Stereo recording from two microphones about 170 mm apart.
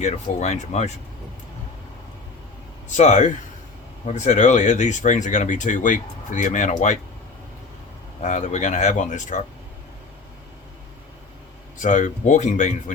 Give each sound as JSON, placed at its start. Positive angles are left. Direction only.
{"t": 0.0, "sound": "speech", "side_deg": 40}
{"t": 2.9, "sound": "speech", "side_deg": 45}
{"t": 8.2, "sound": "speech", "side_deg": 45}
{"t": 11.8, "sound": "speech", "side_deg": 45}